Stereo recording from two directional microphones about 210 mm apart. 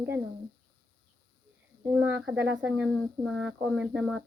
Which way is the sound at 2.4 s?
65° right (ahead or behind).